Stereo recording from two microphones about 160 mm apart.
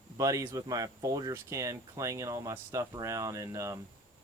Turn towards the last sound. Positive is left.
turn(degrees=-20)  # may be behind; listen again after turning